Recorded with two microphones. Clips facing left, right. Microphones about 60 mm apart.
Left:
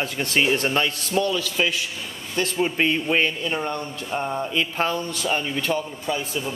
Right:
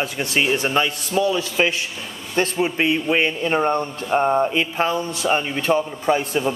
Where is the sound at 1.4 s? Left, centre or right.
Right.